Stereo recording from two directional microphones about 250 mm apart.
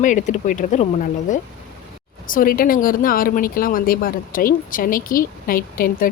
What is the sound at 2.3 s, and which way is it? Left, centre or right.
Speech, left.